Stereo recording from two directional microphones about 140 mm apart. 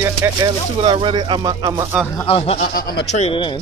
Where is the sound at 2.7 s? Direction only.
90° left.